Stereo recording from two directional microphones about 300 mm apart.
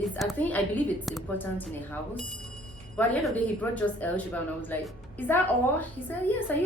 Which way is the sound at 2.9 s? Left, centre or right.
Centre.